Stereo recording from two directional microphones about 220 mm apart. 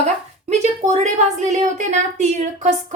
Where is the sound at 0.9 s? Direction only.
30° right (ahead or behind).